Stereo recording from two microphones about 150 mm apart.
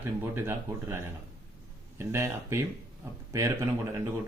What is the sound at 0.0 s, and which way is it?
Speech, 15° right (ahead or behind).